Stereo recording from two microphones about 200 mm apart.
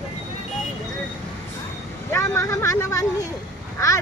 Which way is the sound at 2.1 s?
15° left (ahead or behind).